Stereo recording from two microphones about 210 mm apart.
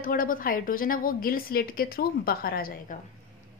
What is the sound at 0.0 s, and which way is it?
A woman's voice, 40° left (ahead or behind).